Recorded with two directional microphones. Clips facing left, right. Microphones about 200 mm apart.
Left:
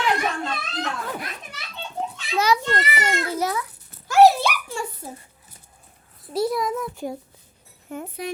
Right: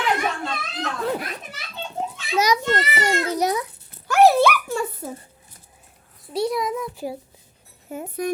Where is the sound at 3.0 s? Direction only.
15° right (ahead or behind).